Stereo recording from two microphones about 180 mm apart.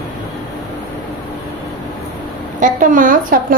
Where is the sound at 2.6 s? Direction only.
45° right (ahead or behind).